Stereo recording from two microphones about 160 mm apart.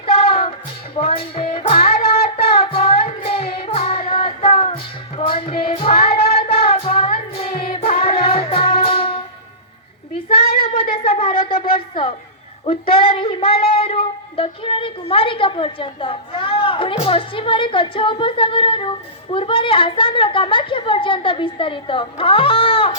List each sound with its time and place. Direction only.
0.0 s music: 35° left (ahead or behind)
10.9 s wind instrument: 35° left (ahead or behind)
11.5 s a sound: 70° left (ahead or behind)
12.6 s speech: 35° left (ahead or behind)